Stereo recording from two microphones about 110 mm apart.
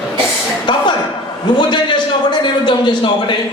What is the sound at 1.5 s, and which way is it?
A man's voice, 45° left (ahead or behind).